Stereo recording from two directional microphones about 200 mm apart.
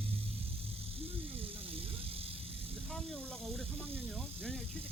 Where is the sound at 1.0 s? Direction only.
30° right (ahead or behind).